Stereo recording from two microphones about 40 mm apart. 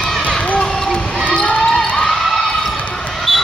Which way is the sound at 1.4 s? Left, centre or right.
Centre.